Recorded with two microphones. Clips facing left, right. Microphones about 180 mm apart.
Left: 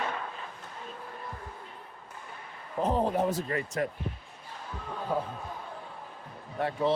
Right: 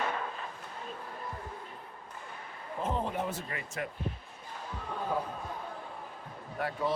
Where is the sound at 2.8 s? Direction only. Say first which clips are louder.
Left 6 dB; 35° left (ahead or behind).